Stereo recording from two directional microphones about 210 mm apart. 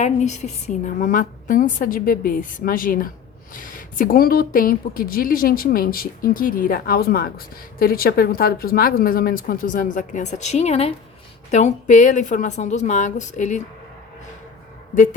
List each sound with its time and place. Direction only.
0.0 s a woman's voice: 35° left (ahead or behind)